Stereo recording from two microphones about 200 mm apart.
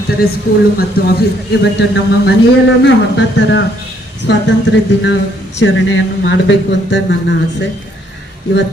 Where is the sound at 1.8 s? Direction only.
60° left (ahead or behind).